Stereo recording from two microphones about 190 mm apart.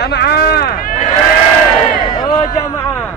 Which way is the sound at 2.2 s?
20° left (ahead or behind).